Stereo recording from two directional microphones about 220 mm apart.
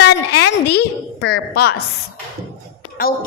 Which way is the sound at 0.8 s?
45° left (ahead or behind).